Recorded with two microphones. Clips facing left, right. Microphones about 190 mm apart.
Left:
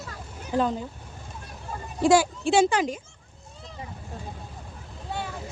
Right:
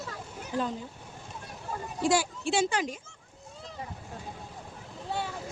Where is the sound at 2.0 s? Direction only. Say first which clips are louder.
Left 7 dB; 90° left.